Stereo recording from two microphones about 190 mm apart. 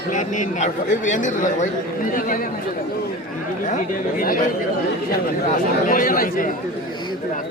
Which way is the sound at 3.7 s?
50° left (ahead or behind).